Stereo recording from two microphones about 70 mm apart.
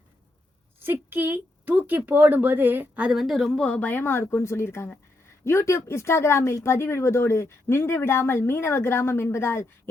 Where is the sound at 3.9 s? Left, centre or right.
Left.